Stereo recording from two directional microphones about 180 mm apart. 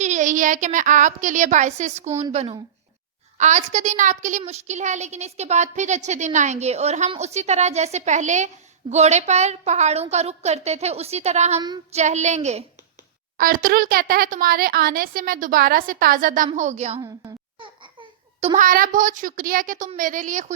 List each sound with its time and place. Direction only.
0.0 s a woman's voice: 40° right (ahead or behind)
13.3 s a woman's voice: 55° right (ahead or behind); by 17.0 s 40° right (ahead or behind)
17.0 s babbling: 25° right (ahead or behind)
18.3 s speech: 40° right (ahead or behind)